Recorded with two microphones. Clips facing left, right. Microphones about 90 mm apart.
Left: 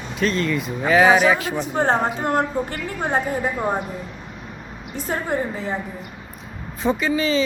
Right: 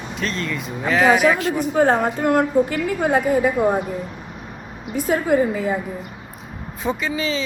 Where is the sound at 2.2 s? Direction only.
60° right (ahead or behind).